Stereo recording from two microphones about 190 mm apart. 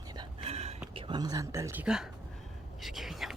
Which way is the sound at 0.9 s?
25° right (ahead or behind).